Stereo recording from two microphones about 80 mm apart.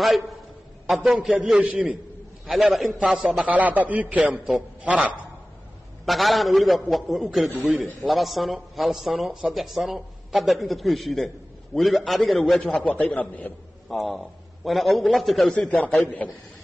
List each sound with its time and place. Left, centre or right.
0.8 s a man's voice: centre
2.4 s a man's voice: centre
3.5 s a man's voice: centre
6.0 s a man's voice: centre
12.7 s a man's voice: centre
13.8 s a man's voice: centre
16.2 s a man's voice: centre